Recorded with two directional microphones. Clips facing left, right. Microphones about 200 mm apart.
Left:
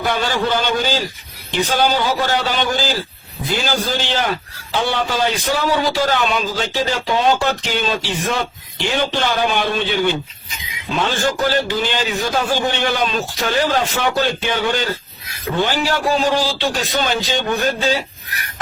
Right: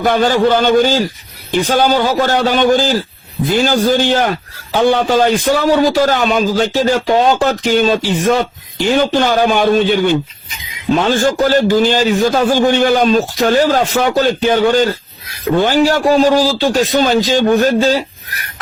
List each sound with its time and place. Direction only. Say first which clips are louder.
0.0 s a man's voice: right 8 dB; 50° right (ahead or behind)